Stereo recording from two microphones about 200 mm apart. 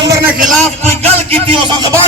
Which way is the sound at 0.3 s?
35° right (ahead or behind).